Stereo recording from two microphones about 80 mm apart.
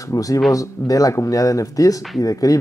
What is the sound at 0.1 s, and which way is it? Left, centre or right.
Speech, left.